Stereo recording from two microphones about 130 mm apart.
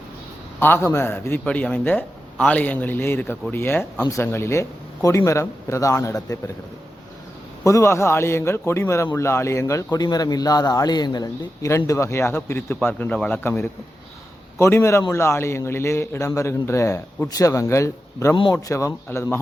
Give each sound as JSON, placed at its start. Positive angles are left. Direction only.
{"t": 0.6, "sound": "a man's voice", "side_deg": 15}
{"t": 7.6, "sound": "a man's voice", "side_deg": 25}